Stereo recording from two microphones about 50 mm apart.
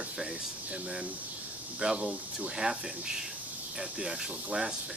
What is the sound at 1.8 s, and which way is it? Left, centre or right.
Speech, centre.